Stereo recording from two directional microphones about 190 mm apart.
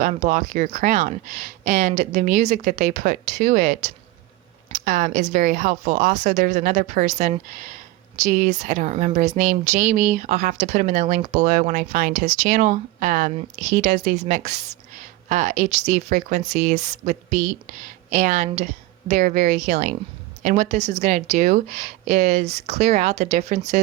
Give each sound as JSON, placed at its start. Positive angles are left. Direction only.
{"t": 0.0, "sound": "a woman's voice", "side_deg": -40}